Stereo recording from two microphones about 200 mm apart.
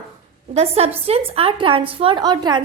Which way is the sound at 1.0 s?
30° right (ahead or behind).